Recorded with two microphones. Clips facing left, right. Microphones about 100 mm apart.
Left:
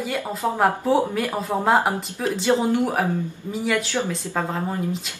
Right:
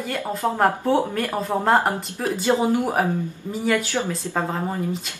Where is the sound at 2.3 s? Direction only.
10° right (ahead or behind).